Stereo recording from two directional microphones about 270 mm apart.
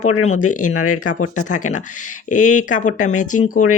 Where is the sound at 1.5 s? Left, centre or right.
Left.